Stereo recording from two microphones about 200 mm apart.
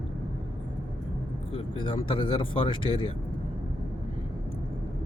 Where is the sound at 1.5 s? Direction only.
30° left (ahead or behind).